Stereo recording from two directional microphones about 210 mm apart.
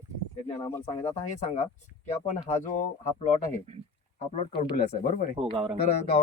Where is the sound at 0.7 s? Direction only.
10° left (ahead or behind).